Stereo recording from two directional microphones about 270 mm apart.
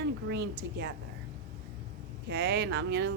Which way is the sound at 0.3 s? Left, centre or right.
Right.